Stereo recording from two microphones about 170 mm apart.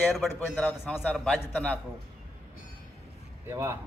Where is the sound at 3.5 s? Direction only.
15° right (ahead or behind).